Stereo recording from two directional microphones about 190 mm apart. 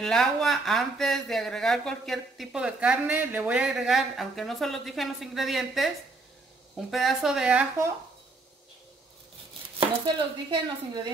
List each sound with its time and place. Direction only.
0.0 s speech: centre (ahead or behind)
6.9 s speech: centre (ahead or behind)
9.8 s speech: 25° right (ahead or behind)